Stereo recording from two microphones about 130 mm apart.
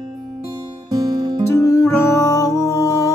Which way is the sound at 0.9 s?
25° right (ahead or behind).